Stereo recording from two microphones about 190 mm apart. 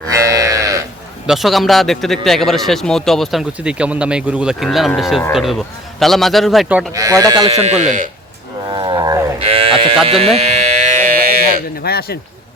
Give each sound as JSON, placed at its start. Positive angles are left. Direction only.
{"t": 0.1, "sound": "livestock", "side_deg": -15}
{"t": 1.3, "sound": "speech", "side_deg": 0}
{"t": 6.9, "sound": "speech", "side_deg": -15}
{"t": 7.5, "sound": "speech", "side_deg": -35}
{"t": 8.7, "sound": "wild animals", "side_deg": -25}
{"t": 9.4, "sound": "sheep", "side_deg": -30}
{"t": 10.1, "sound": "a sound", "side_deg": -30}
{"t": 11.8, "sound": "a man's voice", "side_deg": 55}